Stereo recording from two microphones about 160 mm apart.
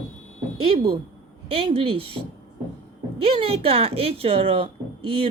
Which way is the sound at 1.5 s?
35° right (ahead or behind).